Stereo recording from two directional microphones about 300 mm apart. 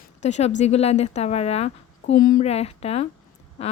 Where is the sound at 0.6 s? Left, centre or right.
Left.